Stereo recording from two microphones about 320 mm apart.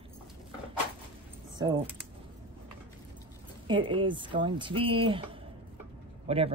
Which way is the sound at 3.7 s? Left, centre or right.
Centre.